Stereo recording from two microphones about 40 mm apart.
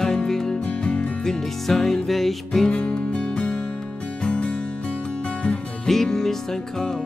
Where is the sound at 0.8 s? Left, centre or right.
Left.